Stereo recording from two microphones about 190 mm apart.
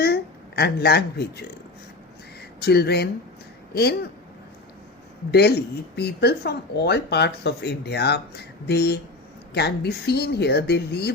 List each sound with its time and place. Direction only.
0.0 s speech: 55° left (ahead or behind)
2.6 s speech: 60° left (ahead or behind)
5.3 s speech: 60° left (ahead or behind)